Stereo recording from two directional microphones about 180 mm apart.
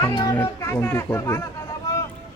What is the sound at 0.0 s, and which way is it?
Speech, 25° left (ahead or behind).